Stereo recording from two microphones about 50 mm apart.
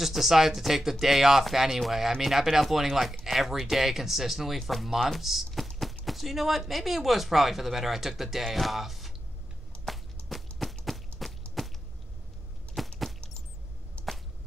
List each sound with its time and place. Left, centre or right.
0.0 s speech: centre
4.6 s speech: centre
9.8 s whip: centre
10.9 s walk: centre
11.6 s arrow: centre
12.8 s a sound: centre
14.0 s arrow: left